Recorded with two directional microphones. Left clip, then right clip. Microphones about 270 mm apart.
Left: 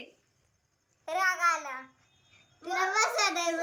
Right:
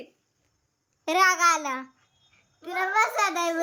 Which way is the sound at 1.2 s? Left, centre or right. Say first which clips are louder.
Right 7 dB; right.